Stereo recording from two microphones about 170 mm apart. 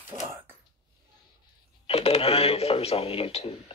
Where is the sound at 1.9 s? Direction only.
35° left (ahead or behind).